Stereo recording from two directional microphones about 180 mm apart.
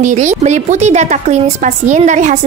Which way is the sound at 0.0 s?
40° right (ahead or behind).